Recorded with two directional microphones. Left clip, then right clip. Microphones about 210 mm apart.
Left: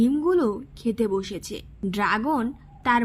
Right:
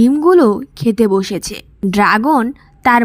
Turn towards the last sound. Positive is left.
turn(degrees=-35)  # may be behind; listen again after turning